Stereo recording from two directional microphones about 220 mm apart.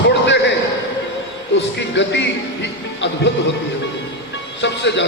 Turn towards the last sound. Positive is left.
turn(degrees=55)  # may be behind; listen again after turning